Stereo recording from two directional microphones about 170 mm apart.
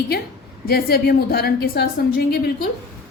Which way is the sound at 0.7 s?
65° left (ahead or behind).